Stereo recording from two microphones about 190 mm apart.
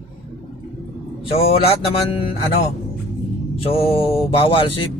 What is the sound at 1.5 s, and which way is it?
Speech, 30° left (ahead or behind).